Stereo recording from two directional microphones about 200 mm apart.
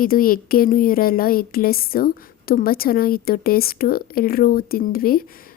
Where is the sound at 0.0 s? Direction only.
45° left (ahead or behind).